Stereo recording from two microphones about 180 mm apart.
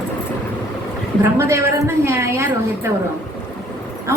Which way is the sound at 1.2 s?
15° right (ahead or behind).